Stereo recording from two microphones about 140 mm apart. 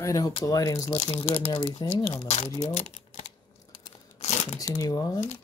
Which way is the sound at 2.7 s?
55° left (ahead or behind).